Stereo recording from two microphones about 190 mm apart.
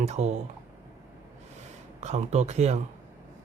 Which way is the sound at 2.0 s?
35° right (ahead or behind).